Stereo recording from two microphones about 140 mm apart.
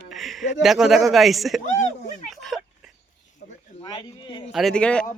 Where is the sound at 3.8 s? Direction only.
35° left (ahead or behind).